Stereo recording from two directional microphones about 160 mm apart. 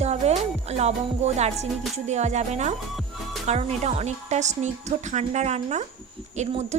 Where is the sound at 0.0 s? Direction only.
40° right (ahead or behind).